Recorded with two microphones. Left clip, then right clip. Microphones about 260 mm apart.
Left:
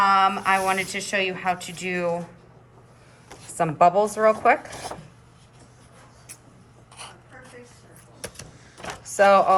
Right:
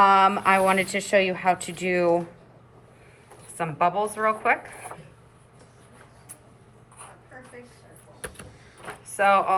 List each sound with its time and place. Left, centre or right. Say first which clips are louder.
0.3 s a woman's voice: right 1 dB; centre
3.6 s a woman's voice: left 5 dB; left
9.1 s a woman's voice: left 4 dB; left